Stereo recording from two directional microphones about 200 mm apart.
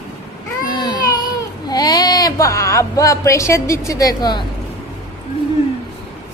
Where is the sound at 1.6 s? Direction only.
20° left (ahead or behind).